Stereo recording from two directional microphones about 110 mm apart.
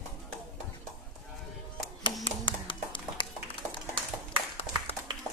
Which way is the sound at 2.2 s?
50° left (ahead or behind).